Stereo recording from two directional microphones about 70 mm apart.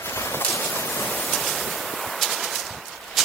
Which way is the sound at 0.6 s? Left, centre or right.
Left.